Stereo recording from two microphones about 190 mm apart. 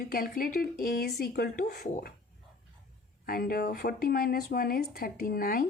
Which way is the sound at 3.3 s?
50° left (ahead or behind).